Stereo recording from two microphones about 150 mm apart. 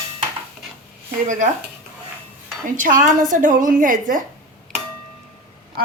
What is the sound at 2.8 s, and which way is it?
A woman's voice, 60° right (ahead or behind).